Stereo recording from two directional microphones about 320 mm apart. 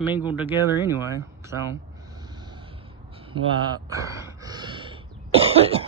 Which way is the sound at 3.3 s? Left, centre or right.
Centre.